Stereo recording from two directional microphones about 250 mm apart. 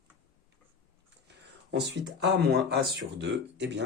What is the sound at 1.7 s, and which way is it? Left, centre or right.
Speech, right.